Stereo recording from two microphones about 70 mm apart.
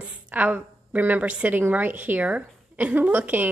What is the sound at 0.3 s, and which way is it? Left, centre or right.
A woman's voice, right.